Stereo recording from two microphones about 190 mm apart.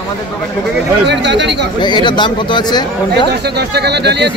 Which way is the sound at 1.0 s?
65° right (ahead or behind).